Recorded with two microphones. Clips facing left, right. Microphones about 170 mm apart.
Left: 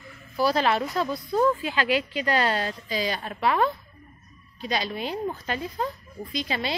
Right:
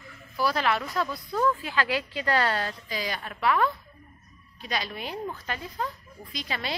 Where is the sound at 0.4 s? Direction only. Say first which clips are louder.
Left 4 dB; 30° left (ahead or behind).